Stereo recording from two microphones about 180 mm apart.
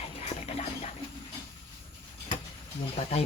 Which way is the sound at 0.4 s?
35° left (ahead or behind).